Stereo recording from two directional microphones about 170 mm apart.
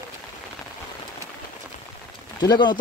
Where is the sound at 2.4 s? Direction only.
25° left (ahead or behind).